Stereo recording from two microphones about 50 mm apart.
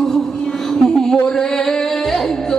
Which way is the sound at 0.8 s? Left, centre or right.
Centre.